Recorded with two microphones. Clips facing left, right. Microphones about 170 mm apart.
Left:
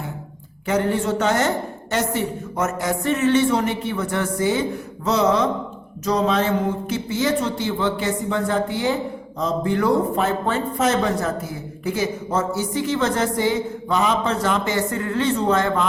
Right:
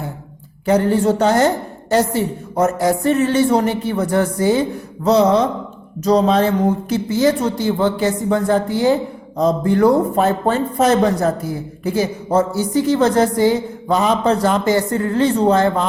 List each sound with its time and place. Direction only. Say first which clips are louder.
0.7 s a woman's voice: right 6 dB; 40° right (ahead or behind)